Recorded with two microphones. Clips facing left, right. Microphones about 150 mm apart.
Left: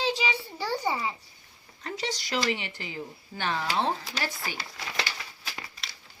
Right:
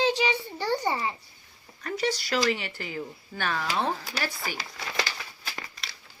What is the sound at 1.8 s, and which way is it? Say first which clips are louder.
Speech: right 5 dB; 20° left (ahead or behind).